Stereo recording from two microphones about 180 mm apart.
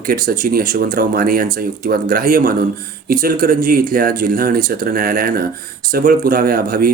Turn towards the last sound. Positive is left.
turn(degrees=-55)  # may be behind; listen again after turning